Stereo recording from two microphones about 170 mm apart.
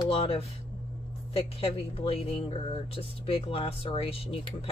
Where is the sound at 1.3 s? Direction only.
35° left (ahead or behind).